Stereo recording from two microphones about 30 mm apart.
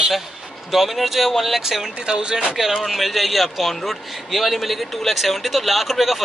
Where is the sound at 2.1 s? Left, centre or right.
Right.